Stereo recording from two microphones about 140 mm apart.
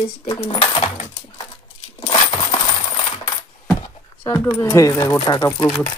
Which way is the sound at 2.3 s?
35° left (ahead or behind).